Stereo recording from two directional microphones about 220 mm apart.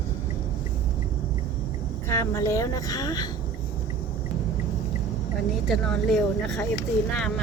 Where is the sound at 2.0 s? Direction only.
15° left (ahead or behind).